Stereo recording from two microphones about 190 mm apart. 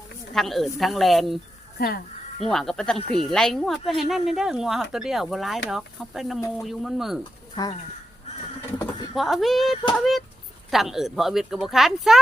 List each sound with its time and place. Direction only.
0.3 s speech: centre (ahead or behind)
1.8 s speech: 50° left (ahead or behind)
2.5 s speech: centre (ahead or behind)
7.5 s speech: 25° left (ahead or behind)
9.1 s speech: centre (ahead or behind)